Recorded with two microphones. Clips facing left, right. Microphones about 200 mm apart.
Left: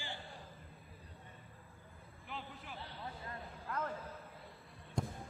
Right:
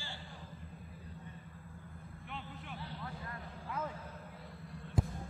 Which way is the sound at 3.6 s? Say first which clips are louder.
Even; 5° right (ahead or behind).